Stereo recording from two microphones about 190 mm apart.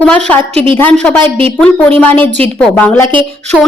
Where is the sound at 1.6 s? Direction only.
5° left (ahead or behind).